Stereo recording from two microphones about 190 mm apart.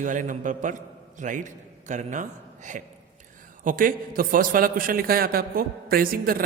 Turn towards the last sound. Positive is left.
turn(degrees=-50)  # may be behind; listen again after turning